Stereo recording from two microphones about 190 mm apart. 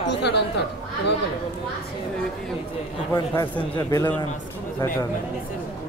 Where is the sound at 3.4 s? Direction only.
20° left (ahead or behind).